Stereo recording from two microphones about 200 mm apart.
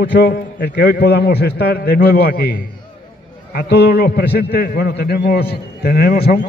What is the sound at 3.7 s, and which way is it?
A man's voice, 55° left (ahead or behind).